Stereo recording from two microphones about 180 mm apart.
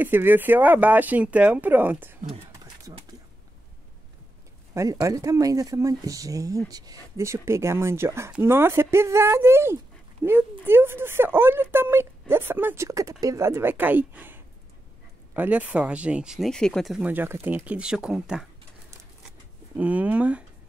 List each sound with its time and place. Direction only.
0.0 s speech: 10° right (ahead or behind)
4.7 s speech: 20° right (ahead or behind); by 18.5 s 5° right (ahead or behind)
19.8 s speech: 10° right (ahead or behind)